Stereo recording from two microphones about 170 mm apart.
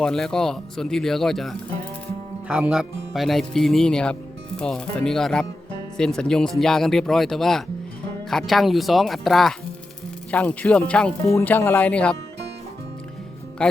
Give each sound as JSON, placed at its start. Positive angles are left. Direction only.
{"t": 0.0, "sound": "speech", "side_deg": 5}
{"t": 13.6, "sound": "speech", "side_deg": 5}